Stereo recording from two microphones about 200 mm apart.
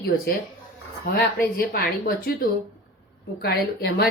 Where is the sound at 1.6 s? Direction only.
50° left (ahead or behind).